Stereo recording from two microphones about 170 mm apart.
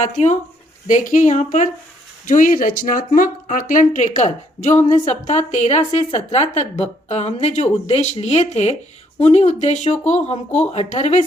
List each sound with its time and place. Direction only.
0.0 s a woman's voice: 45° left (ahead or behind)